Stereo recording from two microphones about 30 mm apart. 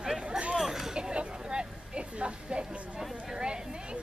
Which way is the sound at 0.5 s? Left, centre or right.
Centre.